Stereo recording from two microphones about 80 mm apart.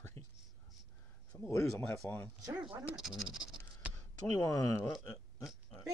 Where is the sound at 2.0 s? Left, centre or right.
Centre.